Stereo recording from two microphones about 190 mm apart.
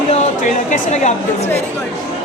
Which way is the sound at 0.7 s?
40° left (ahead or behind).